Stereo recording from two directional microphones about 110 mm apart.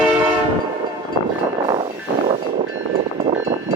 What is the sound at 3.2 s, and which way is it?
Vehicle, 90° right.